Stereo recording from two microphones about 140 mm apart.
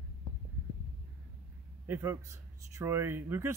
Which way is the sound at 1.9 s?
20° right (ahead or behind).